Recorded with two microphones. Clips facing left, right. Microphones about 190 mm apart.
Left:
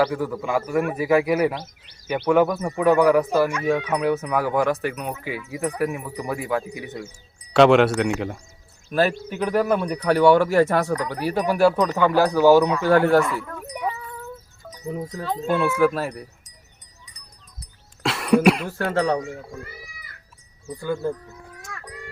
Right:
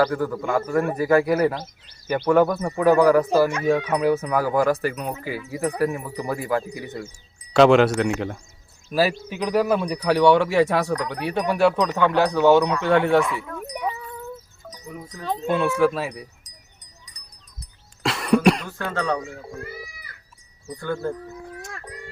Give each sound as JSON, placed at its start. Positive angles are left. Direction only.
{"t": 0.0, "sound": "speech", "side_deg": 5}
{"t": 14.8, "sound": "speech", "side_deg": 25}
{"t": 15.4, "sound": "speech", "side_deg": 0}
{"t": 16.4, "sound": "wind chime", "side_deg": -35}
{"t": 18.0, "sound": "cough", "side_deg": 0}
{"t": 18.8, "sound": "speech", "side_deg": 30}
{"t": 20.7, "sound": "speech", "side_deg": 10}
{"t": 21.6, "sound": "music", "side_deg": -30}